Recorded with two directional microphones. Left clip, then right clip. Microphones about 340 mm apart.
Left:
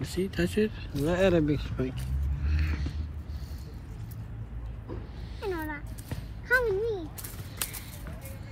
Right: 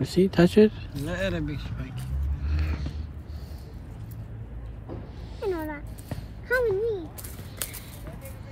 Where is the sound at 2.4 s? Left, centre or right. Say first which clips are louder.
Right 1 dB; centre.